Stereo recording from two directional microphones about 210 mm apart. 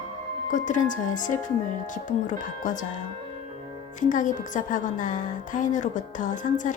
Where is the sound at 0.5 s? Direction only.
35° left (ahead or behind).